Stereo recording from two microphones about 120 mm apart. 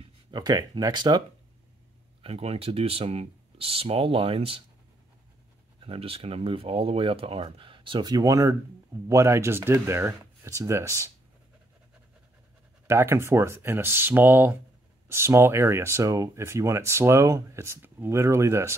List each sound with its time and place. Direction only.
0.3 s speech: 35° right (ahead or behind)
2.2 s speech: 55° right (ahead or behind)
5.8 s speech: 50° right (ahead or behind); by 11.1 s 25° right (ahead or behind)
12.8 s speech: 20° right (ahead or behind)